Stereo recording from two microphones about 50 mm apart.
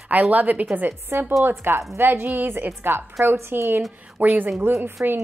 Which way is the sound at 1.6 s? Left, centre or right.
Right.